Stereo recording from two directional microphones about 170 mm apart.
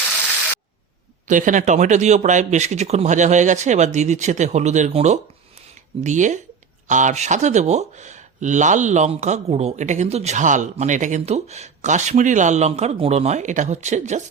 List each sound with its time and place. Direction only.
1.3 s speech: 50° right (ahead or behind)